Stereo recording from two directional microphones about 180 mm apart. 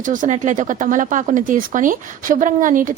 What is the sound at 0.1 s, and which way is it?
Speech, 45° right (ahead or behind).